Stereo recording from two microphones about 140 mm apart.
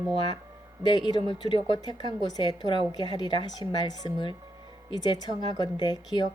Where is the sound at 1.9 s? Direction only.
30° left (ahead or behind).